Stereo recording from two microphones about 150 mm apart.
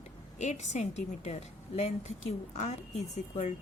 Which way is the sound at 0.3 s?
50° left (ahead or behind).